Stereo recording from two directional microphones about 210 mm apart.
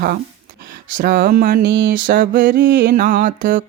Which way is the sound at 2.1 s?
40° right (ahead or behind).